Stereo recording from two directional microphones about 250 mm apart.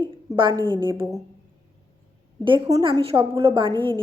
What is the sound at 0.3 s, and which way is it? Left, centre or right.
Speech, centre.